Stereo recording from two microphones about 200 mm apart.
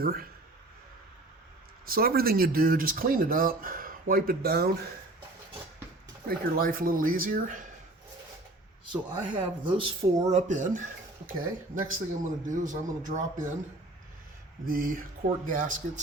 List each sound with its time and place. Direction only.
0.0 s speech: 50° right (ahead or behind)
1.9 s speech: 50° right (ahead or behind)
6.2 s speech: 45° right (ahead or behind)
8.9 s speech: 25° right (ahead or behind); by 13.5 s 40° right (ahead or behind)
14.7 s speech: 45° right (ahead or behind)